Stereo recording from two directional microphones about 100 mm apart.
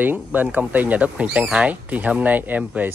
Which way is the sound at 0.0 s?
15° right (ahead or behind).